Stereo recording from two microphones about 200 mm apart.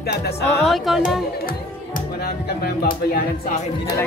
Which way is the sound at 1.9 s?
50° left (ahead or behind).